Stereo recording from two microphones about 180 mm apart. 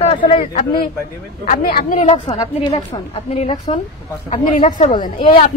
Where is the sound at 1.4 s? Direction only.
50° left (ahead or behind).